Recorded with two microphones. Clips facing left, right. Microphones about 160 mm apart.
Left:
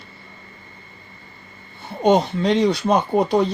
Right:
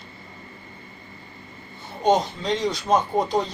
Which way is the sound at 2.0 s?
65° left (ahead or behind).